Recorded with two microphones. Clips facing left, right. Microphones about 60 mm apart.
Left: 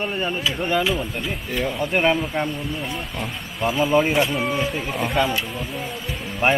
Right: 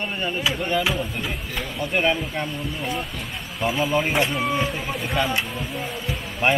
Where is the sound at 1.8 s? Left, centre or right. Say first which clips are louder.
Left 1 dB; centre.